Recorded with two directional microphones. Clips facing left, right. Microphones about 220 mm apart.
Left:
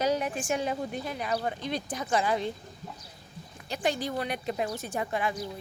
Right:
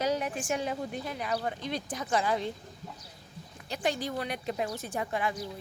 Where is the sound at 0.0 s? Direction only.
25° left (ahead or behind).